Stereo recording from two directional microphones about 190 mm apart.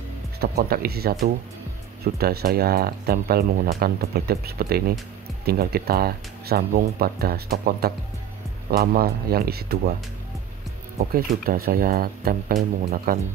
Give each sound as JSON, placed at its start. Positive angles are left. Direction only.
{"t": 0.4, "sound": "speech", "side_deg": -55}
{"t": 2.1, "sound": "speech", "side_deg": -55}
{"t": 11.0, "sound": "speech", "side_deg": -50}